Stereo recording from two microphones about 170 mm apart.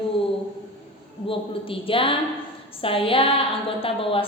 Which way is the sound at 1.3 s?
30° left (ahead or behind).